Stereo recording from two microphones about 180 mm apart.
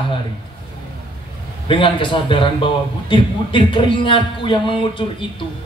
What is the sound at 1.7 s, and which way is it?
Speech, 30° left (ahead or behind).